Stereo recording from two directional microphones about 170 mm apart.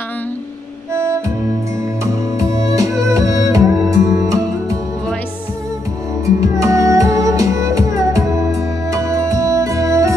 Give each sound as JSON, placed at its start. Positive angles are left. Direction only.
{"t": 0.9, "sound": "music", "side_deg": -15}
{"t": 6.2, "sound": "music", "side_deg": -20}